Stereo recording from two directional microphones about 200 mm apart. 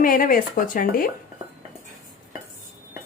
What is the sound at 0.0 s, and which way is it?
Speech, 45° left (ahead or behind).